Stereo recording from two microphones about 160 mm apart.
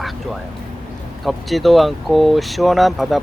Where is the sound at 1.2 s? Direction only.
Centre (ahead or behind).